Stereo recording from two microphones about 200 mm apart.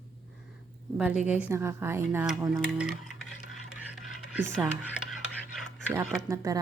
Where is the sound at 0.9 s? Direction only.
5° right (ahead or behind).